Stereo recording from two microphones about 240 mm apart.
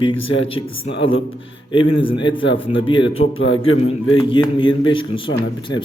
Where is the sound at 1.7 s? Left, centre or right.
Left.